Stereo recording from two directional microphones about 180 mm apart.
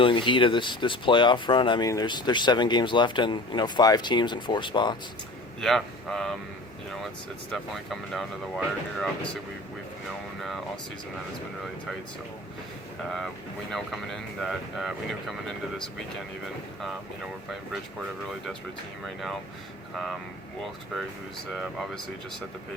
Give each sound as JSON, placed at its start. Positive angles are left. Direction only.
{"t": 0.0, "sound": "speech", "side_deg": 25}
{"t": 5.5, "sound": "speech", "side_deg": 0}
{"t": 7.5, "sound": "speech", "side_deg": 0}
{"t": 13.7, "sound": "speech", "side_deg": 0}
{"t": 19.9, "sound": "speech", "side_deg": 0}
{"t": 21.5, "sound": "speech", "side_deg": 0}